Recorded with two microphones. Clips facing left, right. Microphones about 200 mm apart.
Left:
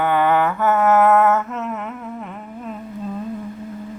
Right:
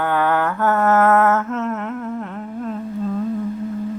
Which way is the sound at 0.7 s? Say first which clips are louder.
Left 1 dB; centre (ahead or behind).